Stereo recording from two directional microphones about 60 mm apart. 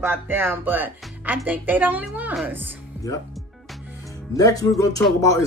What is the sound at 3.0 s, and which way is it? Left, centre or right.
Speech, left.